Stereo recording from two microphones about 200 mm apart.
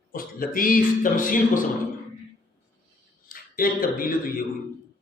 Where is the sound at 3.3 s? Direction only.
45° left (ahead or behind).